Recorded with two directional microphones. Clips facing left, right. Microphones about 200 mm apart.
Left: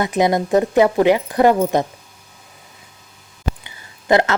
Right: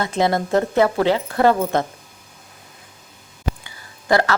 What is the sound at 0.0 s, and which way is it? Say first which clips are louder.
A woman's voice: left 3 dB; 15° left (ahead or behind).